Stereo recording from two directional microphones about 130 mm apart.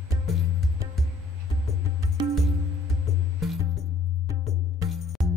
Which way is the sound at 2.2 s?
35° right (ahead or behind).